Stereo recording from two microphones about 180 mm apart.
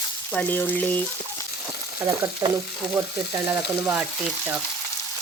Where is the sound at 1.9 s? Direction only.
15° right (ahead or behind).